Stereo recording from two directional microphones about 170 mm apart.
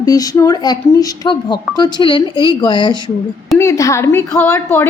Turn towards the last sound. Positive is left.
turn(degrees=10)  # may be behind; listen again after turning